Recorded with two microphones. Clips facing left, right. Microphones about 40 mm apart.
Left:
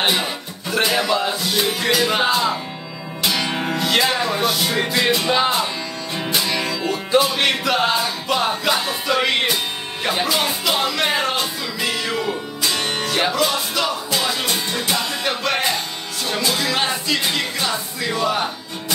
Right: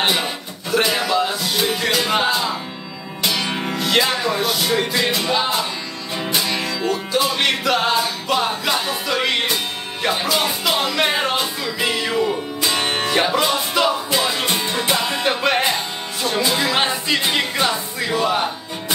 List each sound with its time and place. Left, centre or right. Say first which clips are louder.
0.0 s music: even; centre
12.6 s music: right 2 dB; centre